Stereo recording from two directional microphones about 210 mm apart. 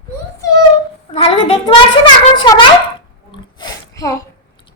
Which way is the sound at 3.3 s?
20° left (ahead or behind).